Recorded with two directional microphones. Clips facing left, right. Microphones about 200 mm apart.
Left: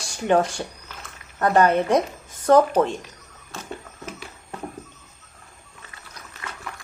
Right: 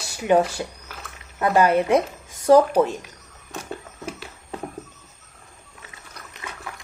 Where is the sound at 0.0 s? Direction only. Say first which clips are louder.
Right 1 dB; 10° right (ahead or behind).